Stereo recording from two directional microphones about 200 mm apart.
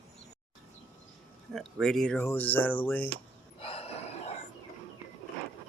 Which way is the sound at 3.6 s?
30° left (ahead or behind).